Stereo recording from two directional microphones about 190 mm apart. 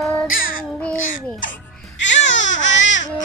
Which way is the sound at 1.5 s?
75° left (ahead or behind).